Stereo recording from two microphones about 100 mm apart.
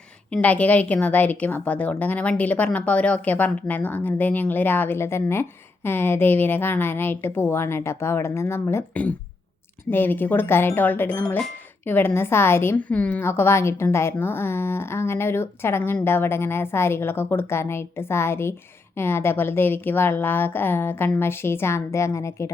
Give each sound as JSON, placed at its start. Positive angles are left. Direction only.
{"t": 0.4, "sound": "a woman's voice", "side_deg": 15}
{"t": 9.9, "sound": "a woman's voice", "side_deg": 20}
{"t": 12.7, "sound": "a woman's voice", "side_deg": 15}